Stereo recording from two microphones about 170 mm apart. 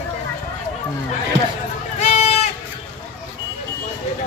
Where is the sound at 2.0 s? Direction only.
40° left (ahead or behind).